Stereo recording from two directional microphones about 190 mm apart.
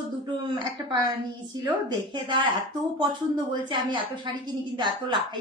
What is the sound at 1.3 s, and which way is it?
A woman's voice, 25° right (ahead or behind).